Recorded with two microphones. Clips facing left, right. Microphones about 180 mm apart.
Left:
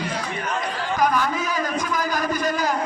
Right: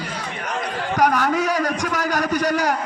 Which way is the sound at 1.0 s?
65° right (ahead or behind).